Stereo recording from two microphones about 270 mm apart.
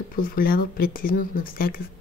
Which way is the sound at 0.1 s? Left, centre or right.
Left.